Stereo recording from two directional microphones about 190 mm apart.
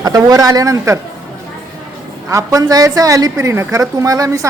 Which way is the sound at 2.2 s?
15° right (ahead or behind).